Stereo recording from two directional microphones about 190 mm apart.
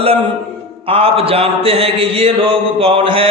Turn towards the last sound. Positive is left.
turn(degrees=-30)  # may be behind; listen again after turning